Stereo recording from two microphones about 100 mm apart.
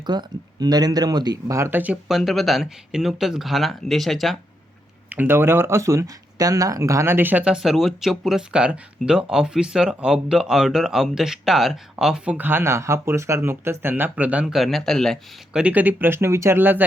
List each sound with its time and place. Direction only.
0.0 s speech: 45° right (ahead or behind)
1.5 s speech: 25° right (ahead or behind)
1.8 s speech: 5° right (ahead or behind)
5.0 s speech: 15° right (ahead or behind)
14.4 s speech: centre (ahead or behind)
15.5 s speech: 15° right (ahead or behind)